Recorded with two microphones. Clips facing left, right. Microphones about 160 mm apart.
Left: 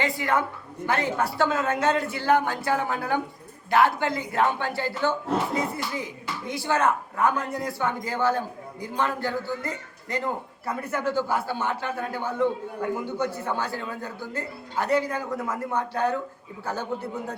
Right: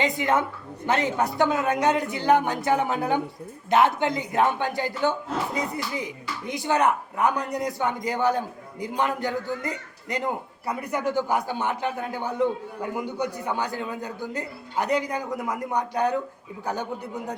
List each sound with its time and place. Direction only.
0.0 s a woman's voice: 20° right (ahead or behind)